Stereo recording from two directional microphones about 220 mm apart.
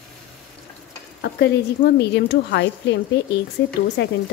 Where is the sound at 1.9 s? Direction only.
50° left (ahead or behind).